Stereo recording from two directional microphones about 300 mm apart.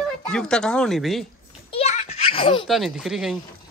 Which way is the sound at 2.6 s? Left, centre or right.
Centre.